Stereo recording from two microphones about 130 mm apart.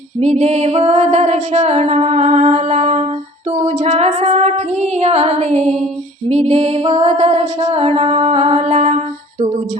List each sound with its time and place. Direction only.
0.2 s music: 60° right (ahead or behind)